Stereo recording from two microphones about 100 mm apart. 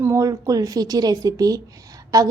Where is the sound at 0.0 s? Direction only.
30° right (ahead or behind).